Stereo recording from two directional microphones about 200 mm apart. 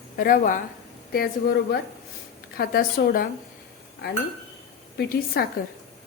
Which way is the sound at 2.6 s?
50° left (ahead or behind).